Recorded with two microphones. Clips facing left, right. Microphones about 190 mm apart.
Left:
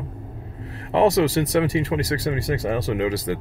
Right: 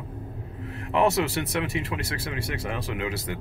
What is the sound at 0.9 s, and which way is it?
Speech, 35° left (ahead or behind).